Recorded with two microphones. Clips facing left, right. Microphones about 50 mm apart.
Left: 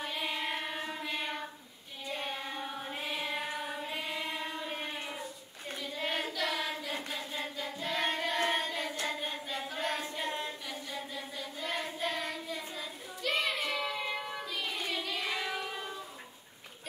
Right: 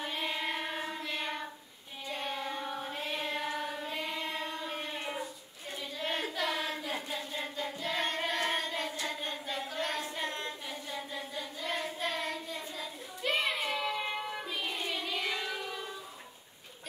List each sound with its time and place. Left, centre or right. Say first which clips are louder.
0.0 s child singing: right 1 dB; centre
2.0 s carnatic music: right 1 dB; centre
2.9 s music: left 2 dB; centre
4.1 s chant: even; centre
5.0 s a sound: right 3 dB; centre
6.0 s child singing: right 1 dB; centre
7.1 s choir: even; centre
8.3 s child singing: left 1 dB; centre
9.0 s hands: left 1 dB; centre
13.3 s child singing: right 1 dB; centre
14.1 s child singing: right 1 dB; centre
15.1 s child singing: even; centre